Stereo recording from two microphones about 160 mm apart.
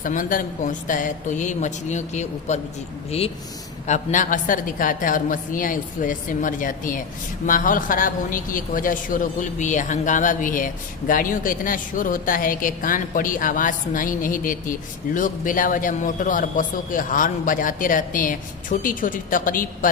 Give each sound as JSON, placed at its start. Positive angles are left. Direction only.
{"t": 0.0, "sound": "a woman's voice", "side_deg": 55}
{"t": 3.8, "sound": "speech", "side_deg": 50}